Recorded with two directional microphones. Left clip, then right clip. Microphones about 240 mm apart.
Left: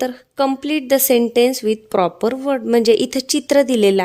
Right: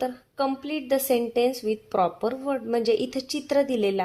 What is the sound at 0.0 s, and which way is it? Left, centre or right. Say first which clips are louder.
A woman's voice: left 8 dB; left.